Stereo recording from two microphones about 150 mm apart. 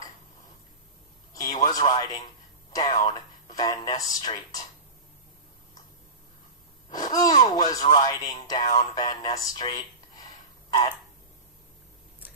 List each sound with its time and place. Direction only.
1.4 s a sound: 25° left (ahead or behind)
3.0 s speech: 25° left (ahead or behind)
6.9 s speech: 25° left (ahead or behind)